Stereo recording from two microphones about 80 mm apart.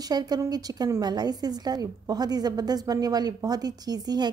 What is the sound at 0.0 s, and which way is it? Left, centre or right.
A woman's voice, right.